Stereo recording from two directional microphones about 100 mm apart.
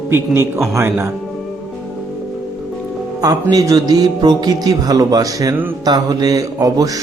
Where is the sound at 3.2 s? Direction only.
35° right (ahead or behind).